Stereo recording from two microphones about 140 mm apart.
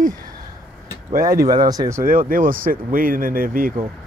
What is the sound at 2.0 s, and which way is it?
Speech, 90° right.